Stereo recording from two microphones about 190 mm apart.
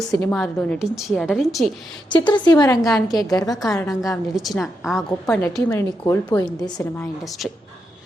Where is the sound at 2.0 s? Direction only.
25° left (ahead or behind).